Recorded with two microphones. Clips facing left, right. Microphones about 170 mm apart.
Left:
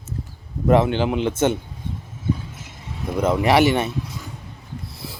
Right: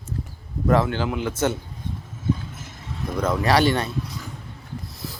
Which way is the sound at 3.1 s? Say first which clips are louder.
Left 3 dB; 15° left (ahead or behind).